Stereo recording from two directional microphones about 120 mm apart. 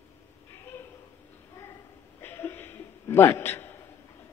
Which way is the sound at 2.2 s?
20° left (ahead or behind).